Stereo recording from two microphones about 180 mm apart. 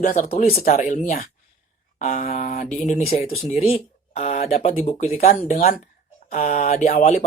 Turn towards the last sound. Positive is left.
turn(degrees=40)  # may be behind; listen again after turning